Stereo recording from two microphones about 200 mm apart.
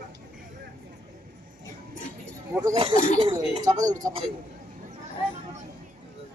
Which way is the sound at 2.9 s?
35° left (ahead or behind).